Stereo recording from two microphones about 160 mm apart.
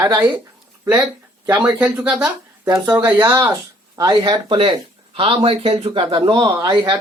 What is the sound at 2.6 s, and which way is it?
Speech, 20° right (ahead or behind).